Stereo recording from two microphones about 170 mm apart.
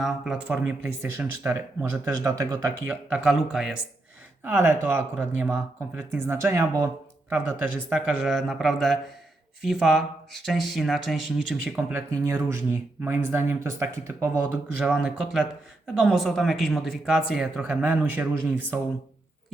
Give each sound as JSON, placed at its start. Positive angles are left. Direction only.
{"t": 0.0, "sound": "speech", "side_deg": 0}
{"t": 4.4, "sound": "speech", "side_deg": -15}
{"t": 11.9, "sound": "speech", "side_deg": -15}
{"t": 14.8, "sound": "speech", "side_deg": -5}